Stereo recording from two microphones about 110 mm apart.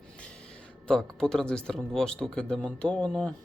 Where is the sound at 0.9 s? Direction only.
5° left (ahead or behind).